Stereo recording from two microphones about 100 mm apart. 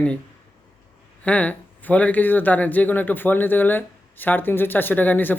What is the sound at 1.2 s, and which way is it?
Speech, 15° left (ahead or behind).